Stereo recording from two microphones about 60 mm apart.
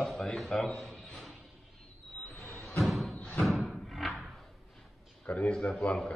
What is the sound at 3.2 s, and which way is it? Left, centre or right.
Thump, left.